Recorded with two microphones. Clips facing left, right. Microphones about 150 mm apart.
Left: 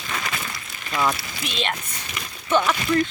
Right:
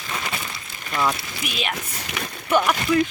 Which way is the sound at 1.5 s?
10° right (ahead or behind).